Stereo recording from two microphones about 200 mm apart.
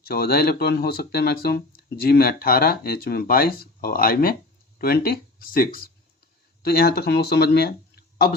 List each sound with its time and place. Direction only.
0.0 s speech: 50° left (ahead or behind)